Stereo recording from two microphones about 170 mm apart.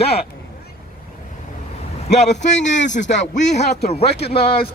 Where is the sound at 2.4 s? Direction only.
45° left (ahead or behind).